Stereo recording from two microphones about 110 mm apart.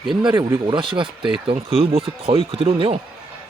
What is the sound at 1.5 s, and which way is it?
Speech, 60° right (ahead or behind).